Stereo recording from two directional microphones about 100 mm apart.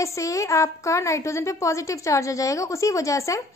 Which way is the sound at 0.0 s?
30° left (ahead or behind).